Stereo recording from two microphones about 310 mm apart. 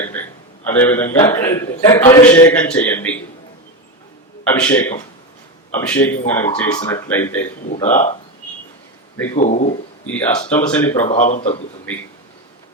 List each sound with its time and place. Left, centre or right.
0.0 s a sound: centre
0.7 s a man's voice: centre
4.4 s a man's voice: centre
7.7 s a man's voice: left
9.3 s a man's voice: left
10.2 s a man's voice: centre
11.0 s a man's voice: left